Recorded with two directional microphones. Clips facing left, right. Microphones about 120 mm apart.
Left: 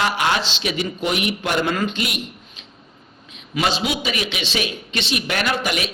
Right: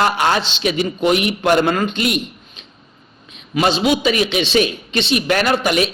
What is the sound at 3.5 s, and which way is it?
Speech, 40° right (ahead or behind).